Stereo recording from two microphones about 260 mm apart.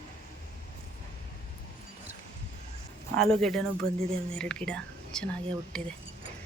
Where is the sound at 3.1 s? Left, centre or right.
Centre.